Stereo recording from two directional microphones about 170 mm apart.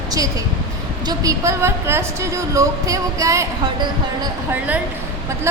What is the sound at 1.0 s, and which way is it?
A woman's voice, 20° right (ahead or behind).